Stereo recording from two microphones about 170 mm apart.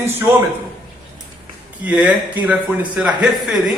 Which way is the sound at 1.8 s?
10° right (ahead or behind).